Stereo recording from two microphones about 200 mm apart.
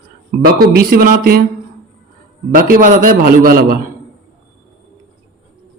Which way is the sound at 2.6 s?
45° right (ahead or behind).